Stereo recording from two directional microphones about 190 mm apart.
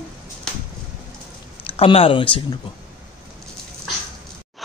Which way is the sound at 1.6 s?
30° left (ahead or behind).